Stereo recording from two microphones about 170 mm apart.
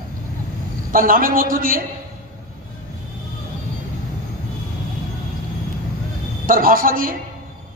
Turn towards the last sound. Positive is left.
turn(degrees=-55)  # may be behind; listen again after turning